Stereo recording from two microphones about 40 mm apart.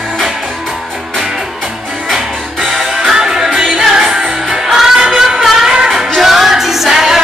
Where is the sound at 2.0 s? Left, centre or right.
Centre.